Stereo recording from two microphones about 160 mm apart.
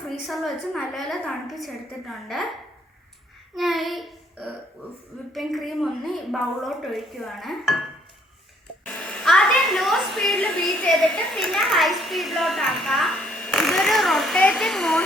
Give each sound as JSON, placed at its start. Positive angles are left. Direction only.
{"t": 0.3, "sound": "a woman's voice", "side_deg": 0}
{"t": 3.5, "sound": "a child's voice", "side_deg": 0}
{"t": 9.2, "sound": "a woman's voice", "side_deg": 0}